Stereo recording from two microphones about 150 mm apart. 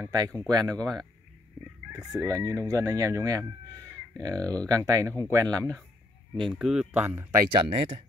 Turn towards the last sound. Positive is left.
turn(degrees=-35)  # may be behind; listen again after turning